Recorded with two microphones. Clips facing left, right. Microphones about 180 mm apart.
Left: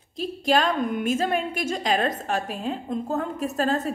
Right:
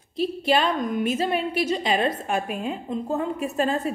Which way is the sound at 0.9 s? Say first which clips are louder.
Even; 50° left (ahead or behind).